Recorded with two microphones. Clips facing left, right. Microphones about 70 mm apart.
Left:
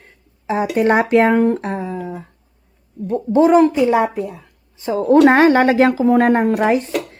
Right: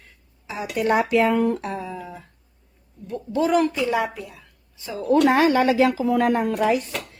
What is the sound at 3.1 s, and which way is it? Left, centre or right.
Speech, left.